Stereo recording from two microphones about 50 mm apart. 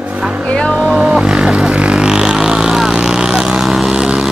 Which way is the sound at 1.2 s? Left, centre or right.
Centre.